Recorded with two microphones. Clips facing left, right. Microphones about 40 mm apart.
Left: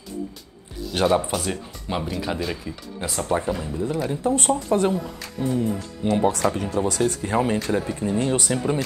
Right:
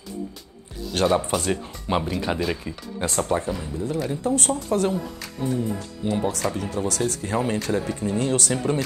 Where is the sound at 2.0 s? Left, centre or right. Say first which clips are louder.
Right 2 dB; centre.